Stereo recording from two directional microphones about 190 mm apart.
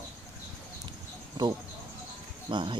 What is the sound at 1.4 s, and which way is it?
Speech, 20° right (ahead or behind).